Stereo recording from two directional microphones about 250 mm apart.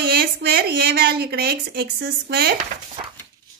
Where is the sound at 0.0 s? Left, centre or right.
Right.